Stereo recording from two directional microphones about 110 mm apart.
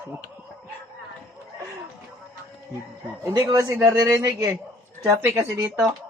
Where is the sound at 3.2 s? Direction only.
25° right (ahead or behind).